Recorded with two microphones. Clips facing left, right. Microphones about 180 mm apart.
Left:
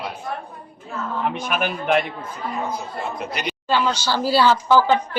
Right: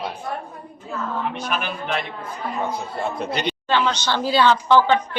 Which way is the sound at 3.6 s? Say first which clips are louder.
Left 2 dB; 10° left (ahead or behind).